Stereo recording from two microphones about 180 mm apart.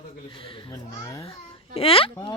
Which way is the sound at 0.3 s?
30° left (ahead or behind).